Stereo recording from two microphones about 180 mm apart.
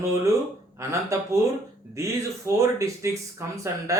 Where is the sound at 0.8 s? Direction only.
15° right (ahead or behind).